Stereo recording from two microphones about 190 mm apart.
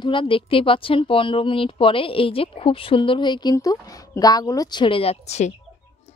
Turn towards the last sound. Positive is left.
turn(degrees=35)  # may be behind; listen again after turning